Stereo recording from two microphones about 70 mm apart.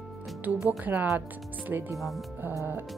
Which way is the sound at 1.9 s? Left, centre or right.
Centre.